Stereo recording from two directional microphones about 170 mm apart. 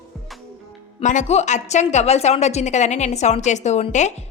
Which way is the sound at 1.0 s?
45° left (ahead or behind).